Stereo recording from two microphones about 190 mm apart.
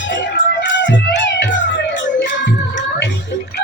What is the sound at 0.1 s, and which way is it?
Music, 65° left (ahead or behind).